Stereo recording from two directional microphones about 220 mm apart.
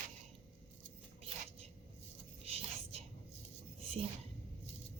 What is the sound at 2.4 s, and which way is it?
Whispering, 30° right (ahead or behind).